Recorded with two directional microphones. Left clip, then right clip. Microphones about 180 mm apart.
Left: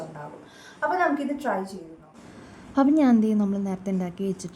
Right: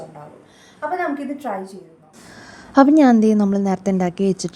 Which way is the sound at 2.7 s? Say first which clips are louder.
Right 8 dB; 35° right (ahead or behind).